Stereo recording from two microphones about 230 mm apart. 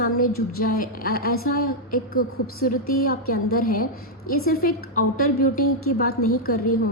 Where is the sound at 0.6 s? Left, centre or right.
Left.